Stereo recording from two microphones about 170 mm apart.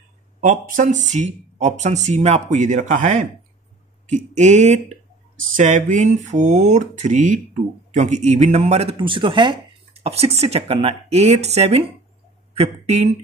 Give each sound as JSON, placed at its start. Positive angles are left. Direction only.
{"t": 0.4, "sound": "speech", "side_deg": -50}